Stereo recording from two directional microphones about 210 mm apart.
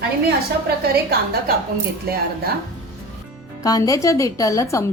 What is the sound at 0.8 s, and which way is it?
Speech, 45° right (ahead or behind).